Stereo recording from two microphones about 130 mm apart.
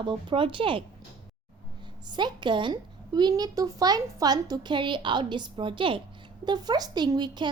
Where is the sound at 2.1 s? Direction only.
35° right (ahead or behind).